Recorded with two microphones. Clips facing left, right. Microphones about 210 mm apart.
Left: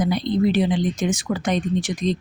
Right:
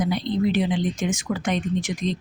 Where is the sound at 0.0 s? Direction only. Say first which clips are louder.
Left 3 dB; 35° left (ahead or behind).